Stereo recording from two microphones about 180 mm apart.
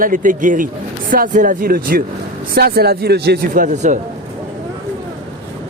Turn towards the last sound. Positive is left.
turn(degrees=-45)  # may be behind; listen again after turning